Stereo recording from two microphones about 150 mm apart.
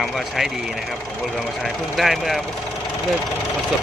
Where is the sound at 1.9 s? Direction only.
Centre (ahead or behind).